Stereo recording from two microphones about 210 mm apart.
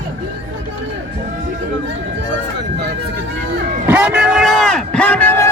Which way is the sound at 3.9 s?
5° right (ahead or behind).